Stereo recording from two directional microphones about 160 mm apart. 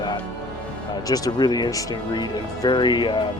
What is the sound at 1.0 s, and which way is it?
Speech, 25° left (ahead or behind).